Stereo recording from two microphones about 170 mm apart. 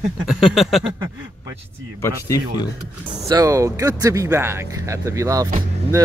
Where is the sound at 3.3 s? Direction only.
20° right (ahead or behind).